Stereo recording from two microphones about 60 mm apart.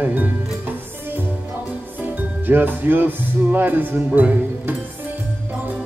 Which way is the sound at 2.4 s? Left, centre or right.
Right.